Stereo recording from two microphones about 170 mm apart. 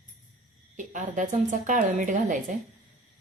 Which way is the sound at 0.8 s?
50° right (ahead or behind).